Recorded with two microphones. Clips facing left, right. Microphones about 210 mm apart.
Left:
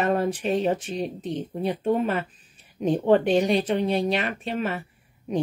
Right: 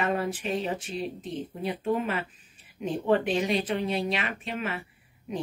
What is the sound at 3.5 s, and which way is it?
Speech, 35° left (ahead or behind).